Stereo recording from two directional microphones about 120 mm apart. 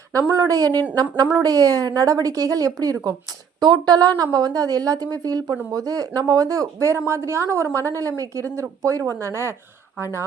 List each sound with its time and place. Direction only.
0.1 s a woman's voice: 30° right (ahead or behind)